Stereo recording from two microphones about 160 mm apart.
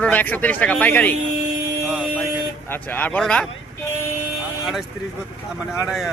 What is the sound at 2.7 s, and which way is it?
Speech, 10° left (ahead or behind).